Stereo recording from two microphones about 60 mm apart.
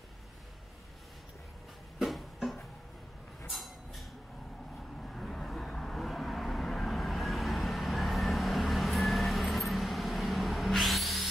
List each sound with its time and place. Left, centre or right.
2.0 s music: centre
3.4 s a sound: centre
5.0 s vehicle: centre